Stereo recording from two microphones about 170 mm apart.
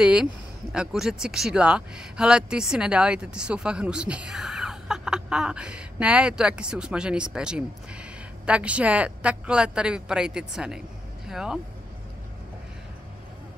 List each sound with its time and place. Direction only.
0.0 s speech: 5° right (ahead or behind)